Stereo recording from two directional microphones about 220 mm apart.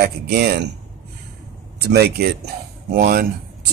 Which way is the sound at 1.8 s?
50° right (ahead or behind).